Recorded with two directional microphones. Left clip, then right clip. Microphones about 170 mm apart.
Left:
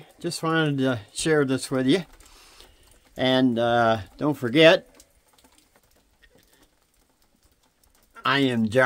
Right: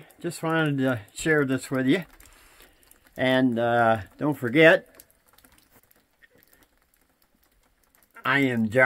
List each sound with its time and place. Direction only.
0.0 s speech: 10° left (ahead or behind)
8.1 s speech: 10° left (ahead or behind)